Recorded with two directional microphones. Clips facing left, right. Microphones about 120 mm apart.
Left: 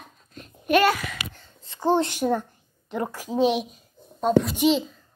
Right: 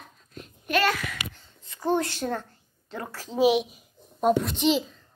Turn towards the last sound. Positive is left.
turn(degrees=5)  # may be behind; listen again after turning